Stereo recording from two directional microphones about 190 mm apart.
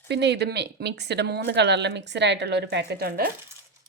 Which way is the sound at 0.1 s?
60° right (ahead or behind).